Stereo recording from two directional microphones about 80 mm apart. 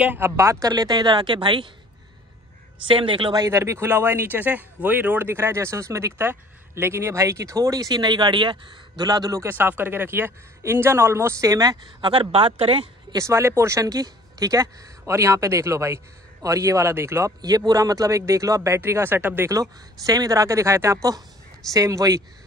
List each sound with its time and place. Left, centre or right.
0.2 s speech: right
2.9 s speech: right
3.3 s speech: right
9.4 s speech: right
11.8 s speech: right
12.6 s speech: right
13.2 s speech: right
17.4 s speech: right
19.5 s speech: right